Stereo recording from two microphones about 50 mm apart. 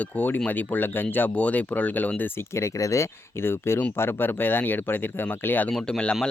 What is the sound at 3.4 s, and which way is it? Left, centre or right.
Speech, left.